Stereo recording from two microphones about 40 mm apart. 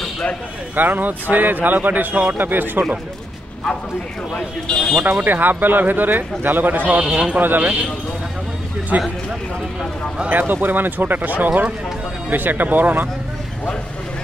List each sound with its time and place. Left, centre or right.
0.7 s speech: right
4.6 s speech: left
5.1 s speech: right
6.8 s speech: right
7.3 s speech: right
8.9 s speech: right
10.3 s speech: right